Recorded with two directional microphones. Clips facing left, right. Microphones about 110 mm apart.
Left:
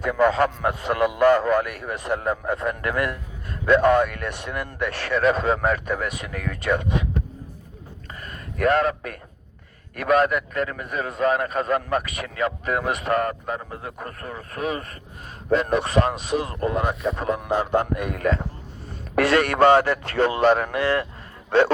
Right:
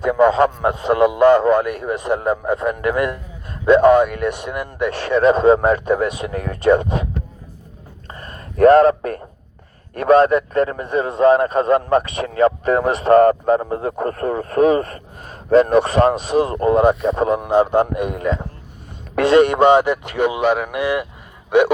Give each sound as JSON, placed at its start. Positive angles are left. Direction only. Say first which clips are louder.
{"t": 0.0, "sound": "speech", "louder": "right 6 dB", "side_deg": -20}
{"t": 8.2, "sound": "a sound", "louder": "right 11 dB", "side_deg": -35}
{"t": 9.9, "sound": "a man's voice", "louder": "right 7 dB", "side_deg": -30}